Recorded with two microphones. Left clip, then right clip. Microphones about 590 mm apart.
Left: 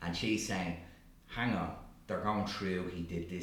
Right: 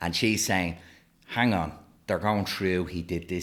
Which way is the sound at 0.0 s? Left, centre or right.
Right.